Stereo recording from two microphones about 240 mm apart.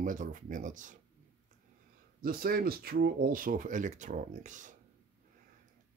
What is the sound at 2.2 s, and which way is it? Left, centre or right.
Speech, right.